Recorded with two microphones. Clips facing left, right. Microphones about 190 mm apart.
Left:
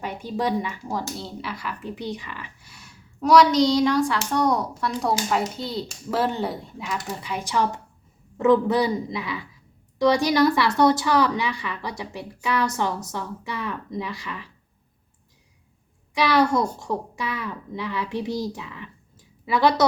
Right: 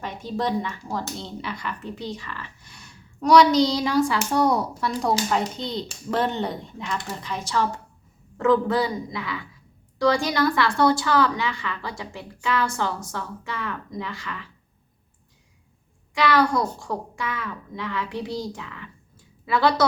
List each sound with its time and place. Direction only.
0.0 s speech: 10° left (ahead or behind)
16.1 s speech: 20° left (ahead or behind)